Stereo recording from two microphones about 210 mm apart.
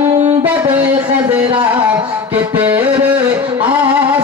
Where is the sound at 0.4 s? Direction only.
10° right (ahead or behind).